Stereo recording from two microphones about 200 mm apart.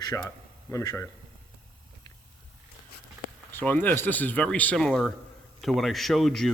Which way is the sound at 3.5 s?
10° left (ahead or behind).